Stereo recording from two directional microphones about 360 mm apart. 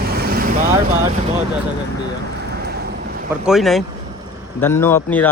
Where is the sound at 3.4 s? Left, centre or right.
Centre.